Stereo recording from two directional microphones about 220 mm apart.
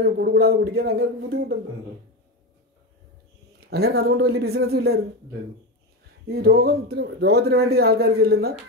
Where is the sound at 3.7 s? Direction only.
45° right (ahead or behind).